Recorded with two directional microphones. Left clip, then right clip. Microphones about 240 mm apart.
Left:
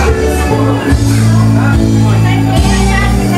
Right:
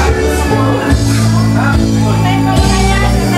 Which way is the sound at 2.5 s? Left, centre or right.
Centre.